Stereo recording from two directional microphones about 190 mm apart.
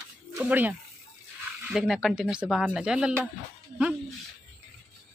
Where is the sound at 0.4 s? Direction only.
10° right (ahead or behind).